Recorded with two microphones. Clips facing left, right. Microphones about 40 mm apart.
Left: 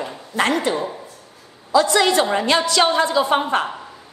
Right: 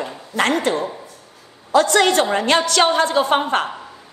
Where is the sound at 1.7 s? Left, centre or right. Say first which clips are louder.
Right 1 dB; right.